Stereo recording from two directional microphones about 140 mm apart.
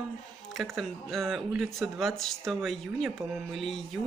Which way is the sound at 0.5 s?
Centre (ahead or behind).